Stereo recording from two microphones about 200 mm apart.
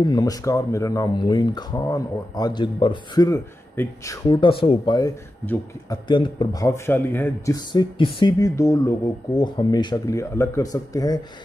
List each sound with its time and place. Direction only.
0.0 s speech: 20° left (ahead or behind)